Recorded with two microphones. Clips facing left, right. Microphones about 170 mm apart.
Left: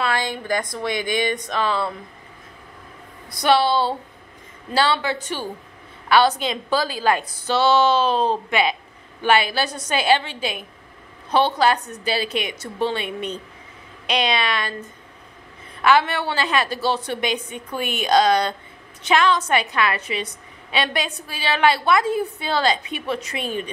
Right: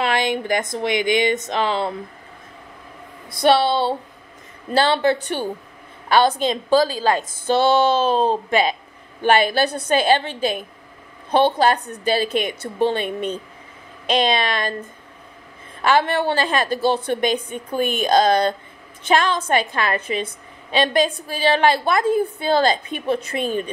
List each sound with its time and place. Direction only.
0.0 s speech: 20° right (ahead or behind)
3.3 s speech: 25° right (ahead or behind)
4.7 s a woman's voice: 55° right (ahead or behind)
6.0 s a woman's voice: 45° right (ahead or behind)
11.7 s a woman's voice: 30° right (ahead or behind)
12.2 s a woman's voice: 50° right (ahead or behind)
15.9 s a woman's voice: 45° right (ahead or behind)